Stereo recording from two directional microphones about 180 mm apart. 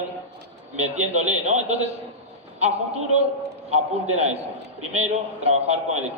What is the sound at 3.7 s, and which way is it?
A man's voice, 35° right (ahead or behind).